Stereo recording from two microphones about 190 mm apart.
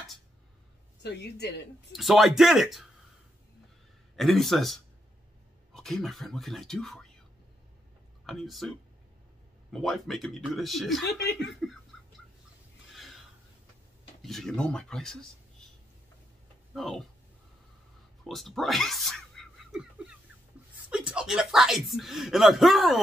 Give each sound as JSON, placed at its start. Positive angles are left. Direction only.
{"t": 1.0, "sound": "speech", "side_deg": 60}
{"t": 1.9, "sound": "speech", "side_deg": 0}
{"t": 4.2, "sound": "speech", "side_deg": 0}
{"t": 8.3, "sound": "speech", "side_deg": 0}
{"t": 12.9, "sound": "a sound", "side_deg": 0}
{"t": 14.2, "sound": "speech", "side_deg": 0}
{"t": 16.7, "sound": "speech", "side_deg": 0}
{"t": 18.3, "sound": "a sound", "side_deg": 0}
{"t": 20.9, "sound": "speech", "side_deg": -5}